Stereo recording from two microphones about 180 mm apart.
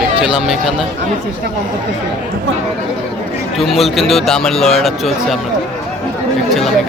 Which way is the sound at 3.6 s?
Centre (ahead or behind).